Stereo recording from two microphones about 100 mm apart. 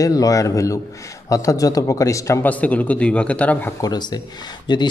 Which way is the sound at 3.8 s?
45° left (ahead or behind).